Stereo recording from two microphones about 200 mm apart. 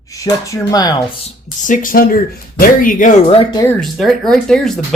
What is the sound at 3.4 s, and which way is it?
Speech, 20° left (ahead or behind).